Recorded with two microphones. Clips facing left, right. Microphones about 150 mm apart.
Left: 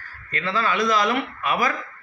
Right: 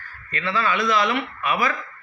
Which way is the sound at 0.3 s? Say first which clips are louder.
Even; 40° left (ahead or behind).